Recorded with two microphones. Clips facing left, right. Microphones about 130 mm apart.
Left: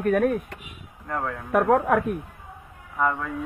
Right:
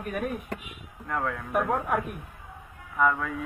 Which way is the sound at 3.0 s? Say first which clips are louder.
Even; 10° left (ahead or behind).